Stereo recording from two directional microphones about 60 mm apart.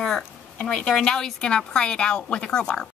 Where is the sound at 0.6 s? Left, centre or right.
Centre.